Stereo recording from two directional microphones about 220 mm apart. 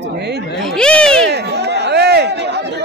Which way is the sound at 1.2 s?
50° right (ahead or behind).